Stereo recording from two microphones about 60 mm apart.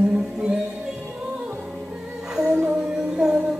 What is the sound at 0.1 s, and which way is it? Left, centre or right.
Music, centre.